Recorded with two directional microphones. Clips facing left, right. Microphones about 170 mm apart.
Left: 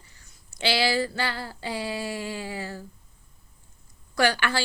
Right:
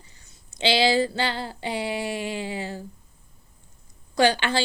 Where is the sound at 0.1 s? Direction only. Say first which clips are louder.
Right 2 dB; 20° right (ahead or behind).